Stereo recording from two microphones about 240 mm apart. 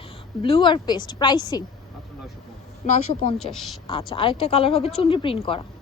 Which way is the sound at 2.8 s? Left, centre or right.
Left.